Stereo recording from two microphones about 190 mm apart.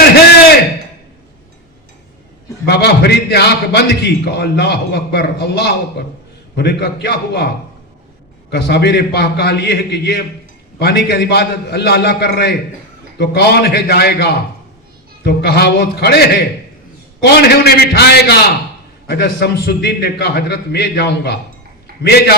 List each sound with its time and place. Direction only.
2.6 s a man's voice: 60° left (ahead or behind)
8.4 s a man's voice: 60° left (ahead or behind)